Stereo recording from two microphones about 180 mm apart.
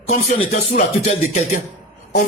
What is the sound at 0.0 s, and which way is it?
Speech, 40° left (ahead or behind).